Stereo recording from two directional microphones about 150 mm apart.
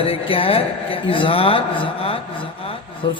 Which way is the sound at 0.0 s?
40° left (ahead or behind).